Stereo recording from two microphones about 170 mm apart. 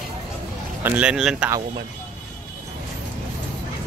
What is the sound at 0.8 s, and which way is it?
Speech, 5° right (ahead or behind).